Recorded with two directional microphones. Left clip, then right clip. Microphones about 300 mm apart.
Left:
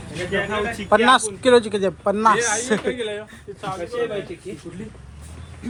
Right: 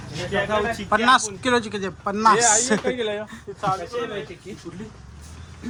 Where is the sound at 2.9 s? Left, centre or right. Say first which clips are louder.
Right 1 dB; right.